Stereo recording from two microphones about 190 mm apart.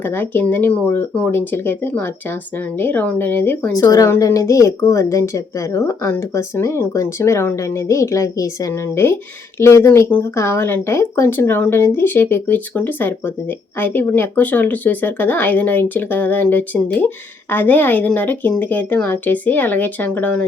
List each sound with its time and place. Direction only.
0.0 s speech: 10° left (ahead or behind)